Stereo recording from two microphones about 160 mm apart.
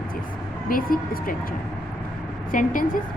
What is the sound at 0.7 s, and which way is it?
Speech, 65° left (ahead or behind).